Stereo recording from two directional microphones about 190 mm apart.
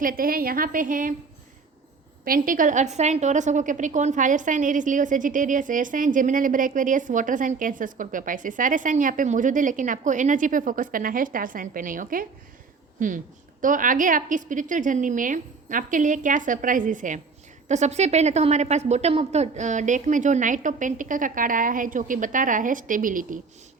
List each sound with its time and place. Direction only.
0.0 s a woman's voice: 50° right (ahead or behind)
2.2 s a woman's voice: 50° right (ahead or behind)